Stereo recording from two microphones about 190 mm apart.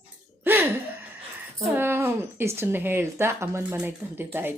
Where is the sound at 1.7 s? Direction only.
10° right (ahead or behind).